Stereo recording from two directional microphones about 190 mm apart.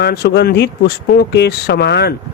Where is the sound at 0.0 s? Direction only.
60° left (ahead or behind).